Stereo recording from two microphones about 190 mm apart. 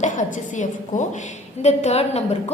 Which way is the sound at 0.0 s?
40° left (ahead or behind).